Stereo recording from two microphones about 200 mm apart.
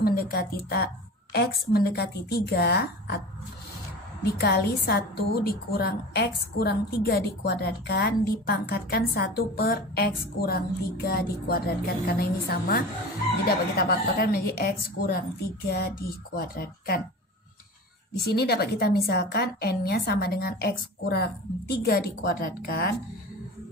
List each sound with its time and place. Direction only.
0.0 s a woman's voice: 50° left (ahead or behind)
4.2 s a woman's voice: 55° left (ahead or behind)
18.1 s a woman's voice: 55° left (ahead or behind)